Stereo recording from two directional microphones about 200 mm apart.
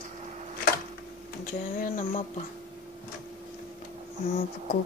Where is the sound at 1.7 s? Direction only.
45° left (ahead or behind).